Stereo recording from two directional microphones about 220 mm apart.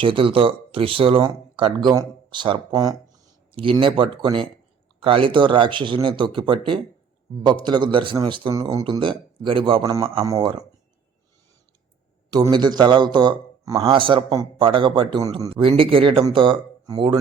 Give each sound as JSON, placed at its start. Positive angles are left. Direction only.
{"t": 0.0, "sound": "speech", "side_deg": -25}
{"t": 7.6, "sound": "speech", "side_deg": -20}
{"t": 12.3, "sound": "speech", "side_deg": -20}